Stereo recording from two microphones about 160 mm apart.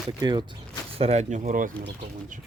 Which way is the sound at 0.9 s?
40° right (ahead or behind).